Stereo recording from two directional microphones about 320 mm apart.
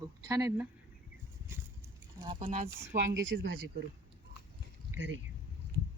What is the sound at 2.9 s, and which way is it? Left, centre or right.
Speech, right.